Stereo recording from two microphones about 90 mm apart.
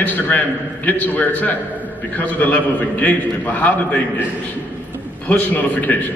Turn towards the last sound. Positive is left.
turn(degrees=20)  # may be behind; listen again after turning